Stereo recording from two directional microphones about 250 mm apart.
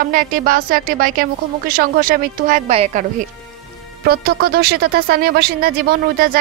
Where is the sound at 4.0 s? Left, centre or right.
Right.